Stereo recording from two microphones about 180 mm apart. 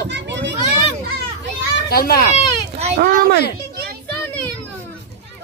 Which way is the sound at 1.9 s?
55° left (ahead or behind).